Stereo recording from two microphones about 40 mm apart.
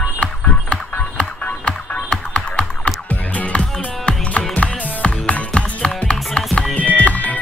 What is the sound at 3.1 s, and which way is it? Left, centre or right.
Music, left.